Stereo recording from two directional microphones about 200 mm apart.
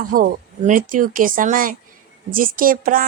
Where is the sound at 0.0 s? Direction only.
45° right (ahead or behind).